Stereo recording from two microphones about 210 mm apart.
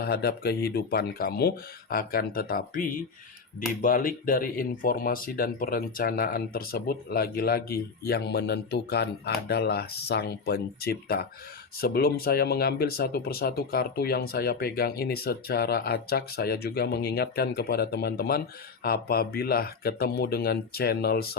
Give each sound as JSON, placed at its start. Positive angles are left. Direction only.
{"t": 0.0, "sound": "speech", "side_deg": 50}